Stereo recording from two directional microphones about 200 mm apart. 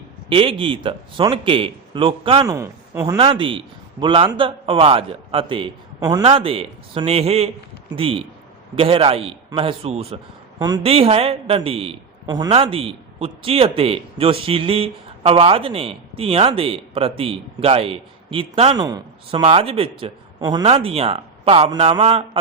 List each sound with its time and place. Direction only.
0.3 s a man's voice: 25° right (ahead or behind)
2.5 s speech: 15° right (ahead or behind)
3.2 s a man's voice: 25° right (ahead or behind)